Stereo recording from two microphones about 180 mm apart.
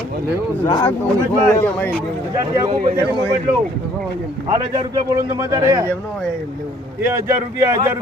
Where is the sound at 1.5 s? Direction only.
10° left (ahead or behind).